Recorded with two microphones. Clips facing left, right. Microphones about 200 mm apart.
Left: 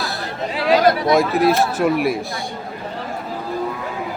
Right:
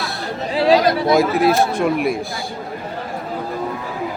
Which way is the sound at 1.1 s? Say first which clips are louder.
Right 1 dB; centre (ahead or behind).